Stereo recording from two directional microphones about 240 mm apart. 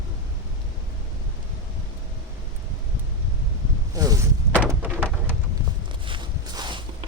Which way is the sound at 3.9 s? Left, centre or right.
Centre.